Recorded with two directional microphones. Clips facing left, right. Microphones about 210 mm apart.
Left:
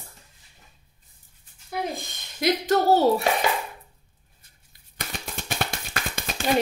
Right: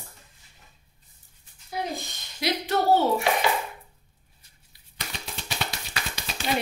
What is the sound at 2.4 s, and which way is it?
Speech, 50° left (ahead or behind).